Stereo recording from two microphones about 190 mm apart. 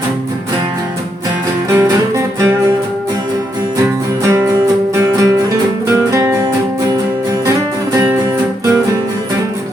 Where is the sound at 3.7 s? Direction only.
15° right (ahead or behind).